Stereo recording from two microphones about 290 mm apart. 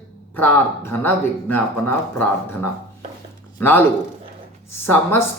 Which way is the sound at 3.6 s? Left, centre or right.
Centre.